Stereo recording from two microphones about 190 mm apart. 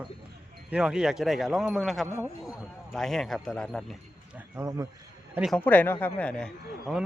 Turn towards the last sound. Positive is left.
turn(degrees=0)  # may be behind; listen again after turning